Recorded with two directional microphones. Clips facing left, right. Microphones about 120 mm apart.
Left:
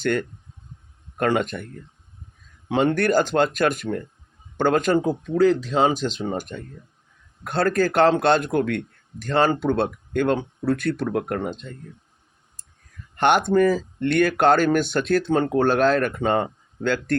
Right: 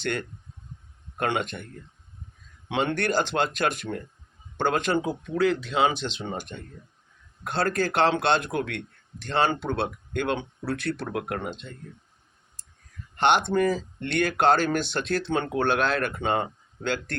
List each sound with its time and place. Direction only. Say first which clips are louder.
0.0 s speech: left 7 dB; 45° left (ahead or behind)
2.6 s speech: left 6 dB; 40° left (ahead or behind)
13.1 s speech: left 4 dB; 45° left (ahead or behind)